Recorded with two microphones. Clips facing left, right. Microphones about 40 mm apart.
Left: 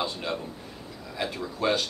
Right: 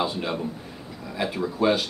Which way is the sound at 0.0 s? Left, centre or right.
Centre.